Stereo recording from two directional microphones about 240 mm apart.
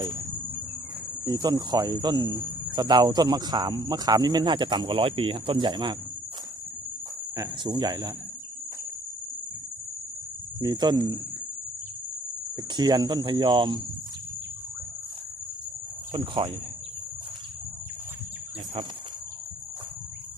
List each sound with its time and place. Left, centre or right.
1.2 s cricket: centre
7.3 s cricket: centre
10.6 s cricket: centre
12.7 s cricket: centre
16.1 s cricket: right